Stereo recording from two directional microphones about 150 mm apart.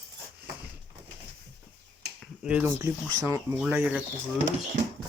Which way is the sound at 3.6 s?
10° right (ahead or behind).